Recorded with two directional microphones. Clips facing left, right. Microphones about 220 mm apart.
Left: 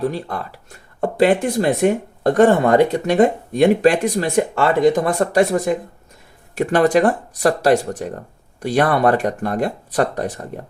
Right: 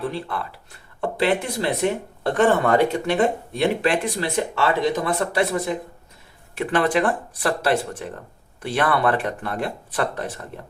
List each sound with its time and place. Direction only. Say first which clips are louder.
0.0 s speech: left 5 dB; 40° left (ahead or behind)